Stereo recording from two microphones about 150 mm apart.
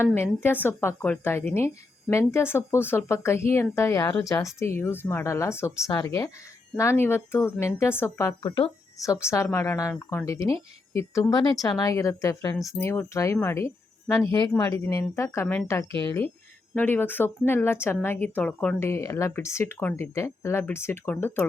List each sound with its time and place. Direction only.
0.0 s speech: 15° left (ahead or behind)
8.4 s speech: 35° left (ahead or behind)
9.2 s speech: 20° left (ahead or behind)
18.9 s speech: 20° left (ahead or behind)